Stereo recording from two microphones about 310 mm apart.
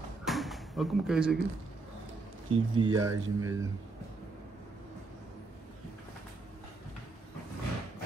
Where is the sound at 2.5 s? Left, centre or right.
Centre.